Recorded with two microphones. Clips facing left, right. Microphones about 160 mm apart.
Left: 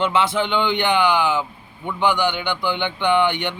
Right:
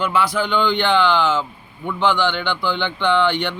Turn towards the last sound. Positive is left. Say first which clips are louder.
# right 1 dB
turn(degrees=15)  # may be behind; listen again after turning